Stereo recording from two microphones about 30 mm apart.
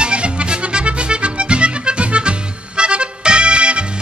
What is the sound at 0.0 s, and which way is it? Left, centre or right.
Music, right.